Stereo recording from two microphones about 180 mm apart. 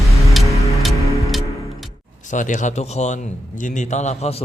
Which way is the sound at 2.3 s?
45° left (ahead or behind).